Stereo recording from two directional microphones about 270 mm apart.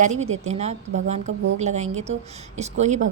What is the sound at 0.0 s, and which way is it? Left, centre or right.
Speech, right.